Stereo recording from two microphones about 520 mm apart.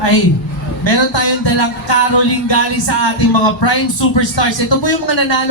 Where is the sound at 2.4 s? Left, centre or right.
Left.